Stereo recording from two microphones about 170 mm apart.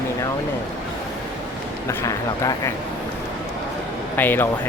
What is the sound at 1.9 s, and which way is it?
Speech, 15° left (ahead or behind).